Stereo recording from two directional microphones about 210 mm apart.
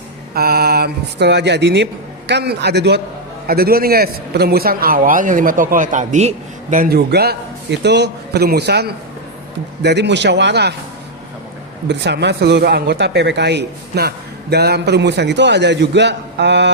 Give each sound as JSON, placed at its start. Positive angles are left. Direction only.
{"t": 0.3, "sound": "a man's voice", "side_deg": -45}
{"t": 11.9, "sound": "a man's voice", "side_deg": -55}